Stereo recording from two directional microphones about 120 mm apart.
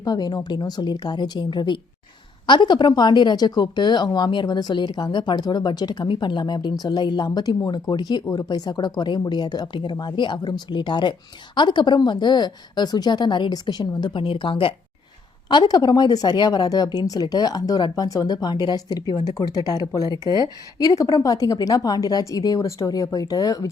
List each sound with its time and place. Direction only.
0.0 s speech: 35° left (ahead or behind)
15.4 s speech: 35° left (ahead or behind)